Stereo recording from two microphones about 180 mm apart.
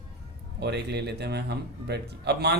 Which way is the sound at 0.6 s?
70° right (ahead or behind).